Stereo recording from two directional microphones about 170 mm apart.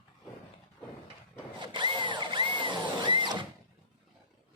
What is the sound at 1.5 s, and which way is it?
Drill, 25° right (ahead or behind).